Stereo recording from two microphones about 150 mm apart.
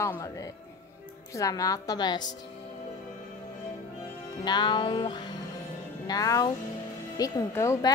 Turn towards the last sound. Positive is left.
turn(degrees=20)  # may be behind; listen again after turning